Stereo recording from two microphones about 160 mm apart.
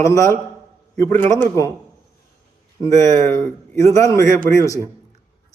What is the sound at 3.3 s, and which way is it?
A man's voice, 15° left (ahead or behind).